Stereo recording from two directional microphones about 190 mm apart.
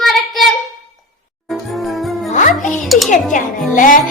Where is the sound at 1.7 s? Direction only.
Centre (ahead or behind).